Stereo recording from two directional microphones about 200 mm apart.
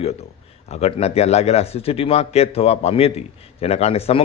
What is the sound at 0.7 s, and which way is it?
A man's voice, 30° left (ahead or behind).